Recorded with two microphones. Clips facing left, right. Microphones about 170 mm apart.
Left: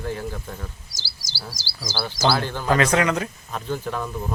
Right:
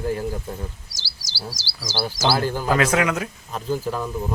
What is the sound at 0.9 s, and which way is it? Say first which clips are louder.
Chirp: even; 70° right (ahead or behind).